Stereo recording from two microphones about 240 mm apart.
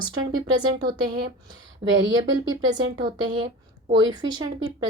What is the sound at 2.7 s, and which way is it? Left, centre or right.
Speech, centre.